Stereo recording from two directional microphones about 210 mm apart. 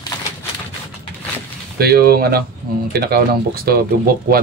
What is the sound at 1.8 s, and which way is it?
Speech, 45° right (ahead or behind).